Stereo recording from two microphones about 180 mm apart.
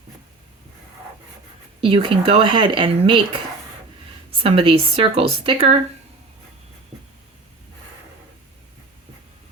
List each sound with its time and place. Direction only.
1.8 s speech: 30° right (ahead or behind)